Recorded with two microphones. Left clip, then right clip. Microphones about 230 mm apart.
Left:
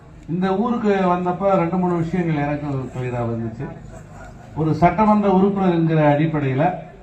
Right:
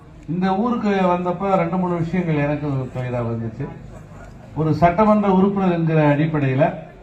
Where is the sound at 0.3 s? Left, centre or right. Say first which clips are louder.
Even; right.